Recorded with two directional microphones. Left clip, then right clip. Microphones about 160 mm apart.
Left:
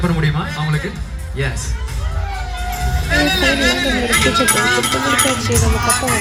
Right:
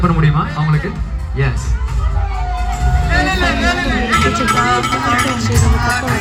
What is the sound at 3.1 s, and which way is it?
Speech, 25° right (ahead or behind).